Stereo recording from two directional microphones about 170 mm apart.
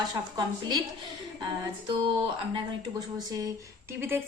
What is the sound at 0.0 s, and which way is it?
Speech, 25° right (ahead or behind).